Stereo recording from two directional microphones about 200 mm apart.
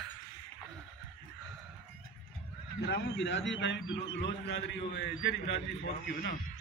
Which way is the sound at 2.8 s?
60° left (ahead or behind).